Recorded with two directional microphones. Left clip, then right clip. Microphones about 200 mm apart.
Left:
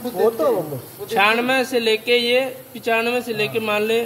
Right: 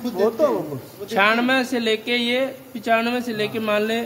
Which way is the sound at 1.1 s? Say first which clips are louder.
Left 1 dB; 25° right (ahead or behind).